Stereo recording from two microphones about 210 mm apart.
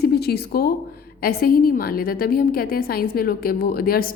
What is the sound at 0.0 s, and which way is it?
A woman's voice, 50° left (ahead or behind).